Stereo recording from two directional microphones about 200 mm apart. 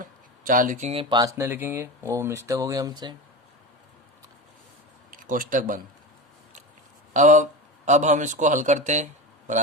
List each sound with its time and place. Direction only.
0.0 s speech: 40° right (ahead or behind)
1.1 s speech: 15° right (ahead or behind)
5.1 s speech: 45° right (ahead or behind)
7.1 s speech: 40° right (ahead or behind)